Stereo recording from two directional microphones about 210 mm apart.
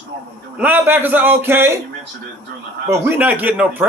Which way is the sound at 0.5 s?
10° right (ahead or behind).